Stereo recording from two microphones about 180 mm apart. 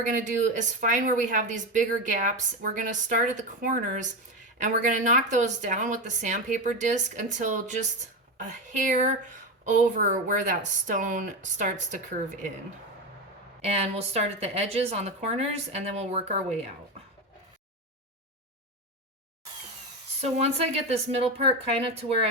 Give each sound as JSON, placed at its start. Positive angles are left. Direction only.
{"t": 0.0, "sound": "speech", "side_deg": -45}
{"t": 8.9, "sound": "a woman's voice", "side_deg": -40}
{"t": 13.6, "sound": "a woman's voice", "side_deg": -35}
{"t": 20.2, "sound": "a woman's voice", "side_deg": -35}